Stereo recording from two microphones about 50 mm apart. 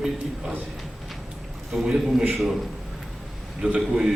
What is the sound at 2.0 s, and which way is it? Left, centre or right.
Speech, centre.